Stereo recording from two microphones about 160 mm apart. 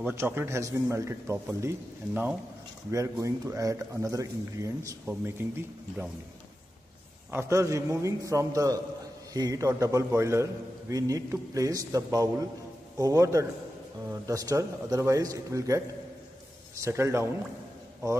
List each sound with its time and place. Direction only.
0.0 s a man's voice: 15° right (ahead or behind)
7.2 s a man's voice: 15° right (ahead or behind)